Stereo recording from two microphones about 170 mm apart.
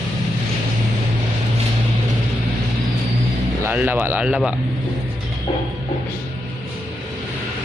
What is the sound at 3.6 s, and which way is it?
Speech, 10° right (ahead or behind).